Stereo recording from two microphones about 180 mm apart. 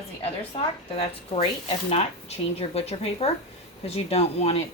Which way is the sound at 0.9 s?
35° left (ahead or behind).